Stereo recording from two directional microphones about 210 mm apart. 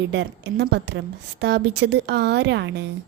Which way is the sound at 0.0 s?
55° right (ahead or behind).